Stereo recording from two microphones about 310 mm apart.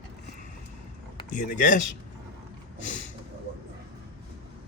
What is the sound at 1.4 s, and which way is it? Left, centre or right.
Speech, left.